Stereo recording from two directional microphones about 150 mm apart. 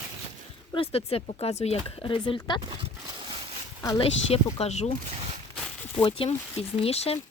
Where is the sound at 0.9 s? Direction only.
40° left (ahead or behind).